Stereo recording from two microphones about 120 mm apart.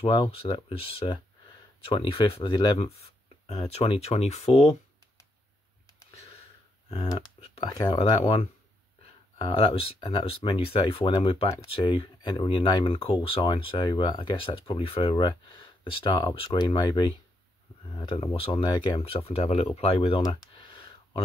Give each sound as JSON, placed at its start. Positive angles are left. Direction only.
{"t": 0.0, "sound": "speech", "side_deg": 40}
{"t": 0.4, "sound": "speech", "side_deg": 55}
{"t": 2.8, "sound": "a sound", "side_deg": 60}
{"t": 3.6, "sound": "speech", "side_deg": 55}
{"t": 7.3, "sound": "speech", "side_deg": 45}
{"t": 9.5, "sound": "speech", "side_deg": 50}
{"t": 15.8, "sound": "speech", "side_deg": 40}
{"t": 20.2, "sound": "a sound", "side_deg": 45}